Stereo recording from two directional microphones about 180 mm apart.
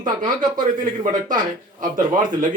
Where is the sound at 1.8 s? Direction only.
45° right (ahead or behind).